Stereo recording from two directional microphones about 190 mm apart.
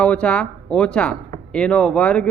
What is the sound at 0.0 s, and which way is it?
Speech, 5° left (ahead or behind).